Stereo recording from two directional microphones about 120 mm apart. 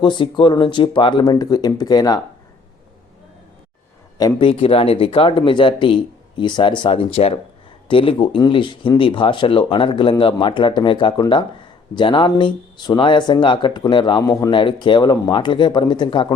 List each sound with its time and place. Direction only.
0.0 s speech: 45° left (ahead or behind)
4.4 s speech: 50° left (ahead or behind)